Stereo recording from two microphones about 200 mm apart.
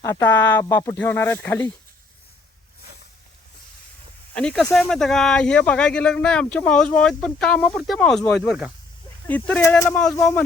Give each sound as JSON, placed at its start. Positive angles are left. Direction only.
{"t": 0.0, "sound": "speech", "side_deg": 15}
{"t": 4.4, "sound": "speech", "side_deg": 5}
{"t": 9.2, "sound": "speech", "side_deg": 10}